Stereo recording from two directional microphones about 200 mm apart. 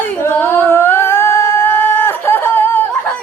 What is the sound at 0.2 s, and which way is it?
Singing, 10° left (ahead or behind).